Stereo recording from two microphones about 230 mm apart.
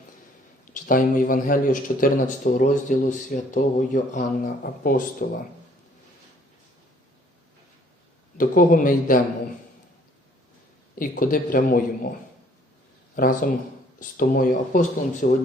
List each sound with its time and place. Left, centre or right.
0.7 s speech: left
8.4 s speech: left
10.9 s speech: left
13.1 s speech: left